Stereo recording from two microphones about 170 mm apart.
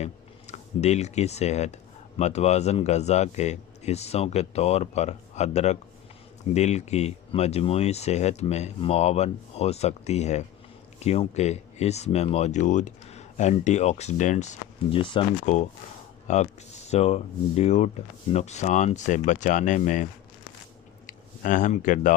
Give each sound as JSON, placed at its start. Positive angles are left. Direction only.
{"t": 0.0, "sound": "speech", "side_deg": 40}
{"t": 14.9, "sound": "speech", "side_deg": 30}
{"t": 16.2, "sound": "speech", "side_deg": 40}
{"t": 21.1, "sound": "speech", "side_deg": 50}